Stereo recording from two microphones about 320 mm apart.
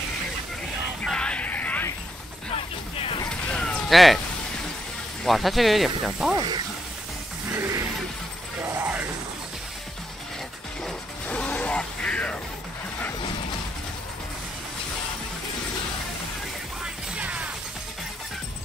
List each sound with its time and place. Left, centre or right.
1.0 s music: centre
2.5 s vehicle: centre
3.3 s a sound: centre
5.2 s speech: centre
6.3 s speech: centre
7.5 s music: centre
8.6 s a sound: centre
10.8 s music: centre
16.8 s music: centre